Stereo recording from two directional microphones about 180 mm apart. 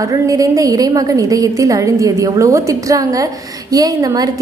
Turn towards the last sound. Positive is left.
turn(degrees=-20)  # may be behind; listen again after turning